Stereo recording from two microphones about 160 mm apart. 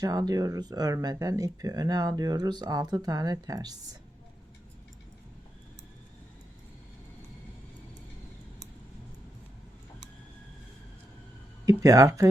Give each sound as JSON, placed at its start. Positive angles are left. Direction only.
{"t": 0.0, "sound": "speech", "side_deg": -25}
{"t": 11.6, "sound": "speech", "side_deg": -20}